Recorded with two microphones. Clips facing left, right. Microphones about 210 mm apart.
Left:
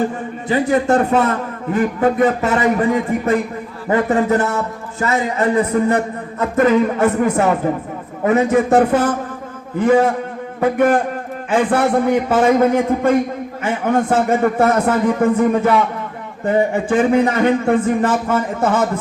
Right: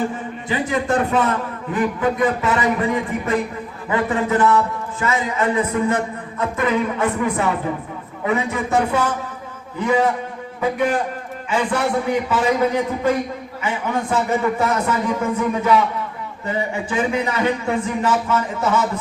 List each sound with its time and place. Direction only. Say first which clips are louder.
0.4 s a man's voice: left 6 dB; 40° left (ahead or behind)